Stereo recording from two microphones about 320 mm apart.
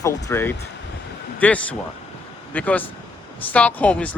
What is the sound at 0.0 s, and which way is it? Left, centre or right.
Speech, centre.